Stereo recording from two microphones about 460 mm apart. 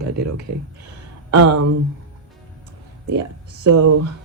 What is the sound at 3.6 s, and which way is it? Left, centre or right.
Speech, right.